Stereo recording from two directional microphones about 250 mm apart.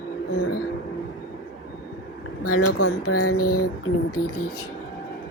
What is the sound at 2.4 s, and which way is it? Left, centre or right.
Speech, left.